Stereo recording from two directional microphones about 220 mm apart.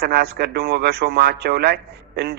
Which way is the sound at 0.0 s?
45° right (ahead or behind).